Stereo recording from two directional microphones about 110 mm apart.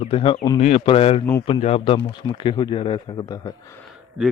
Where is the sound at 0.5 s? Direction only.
75° left (ahead or behind).